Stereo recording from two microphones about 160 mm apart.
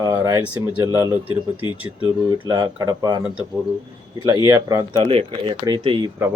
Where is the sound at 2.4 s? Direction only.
25° right (ahead or behind).